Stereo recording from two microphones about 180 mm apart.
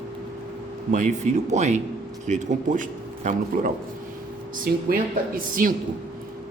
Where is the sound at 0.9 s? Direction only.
40° right (ahead or behind).